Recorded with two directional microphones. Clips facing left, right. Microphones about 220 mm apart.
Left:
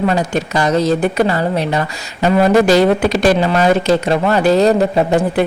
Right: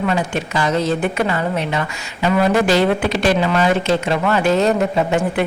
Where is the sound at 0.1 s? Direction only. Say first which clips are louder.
Left 3 dB; 40° left (ahead or behind).